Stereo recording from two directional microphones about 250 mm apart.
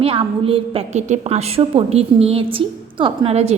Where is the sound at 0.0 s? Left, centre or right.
Right.